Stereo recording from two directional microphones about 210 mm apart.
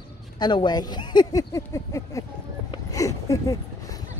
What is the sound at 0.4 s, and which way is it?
Speech, 20° left (ahead or behind).